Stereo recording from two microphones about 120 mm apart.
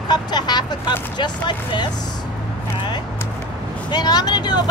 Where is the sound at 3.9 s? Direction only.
35° left (ahead or behind).